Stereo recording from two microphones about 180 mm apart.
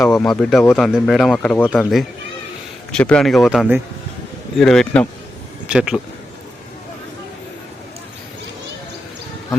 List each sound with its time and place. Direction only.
0.0 s speech: 5° left (ahead or behind)